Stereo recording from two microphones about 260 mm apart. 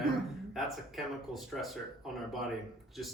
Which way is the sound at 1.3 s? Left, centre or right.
Centre.